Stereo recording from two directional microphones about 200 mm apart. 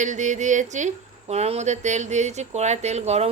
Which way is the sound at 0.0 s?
35° right (ahead or behind).